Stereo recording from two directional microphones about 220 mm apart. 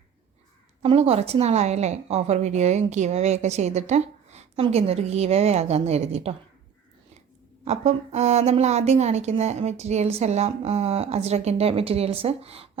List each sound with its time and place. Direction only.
0.8 s a woman's voice: 30° right (ahead or behind)
7.6 s a woman's voice: 30° right (ahead or behind)